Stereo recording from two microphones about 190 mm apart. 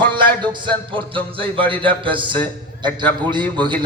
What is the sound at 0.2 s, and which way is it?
Speech, 25° right (ahead or behind).